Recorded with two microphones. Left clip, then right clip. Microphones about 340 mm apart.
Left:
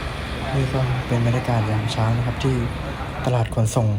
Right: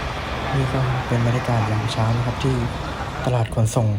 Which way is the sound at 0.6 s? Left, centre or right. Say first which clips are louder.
Right 2 dB; centre.